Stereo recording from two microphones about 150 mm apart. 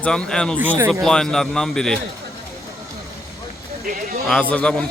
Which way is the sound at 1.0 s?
5° left (ahead or behind).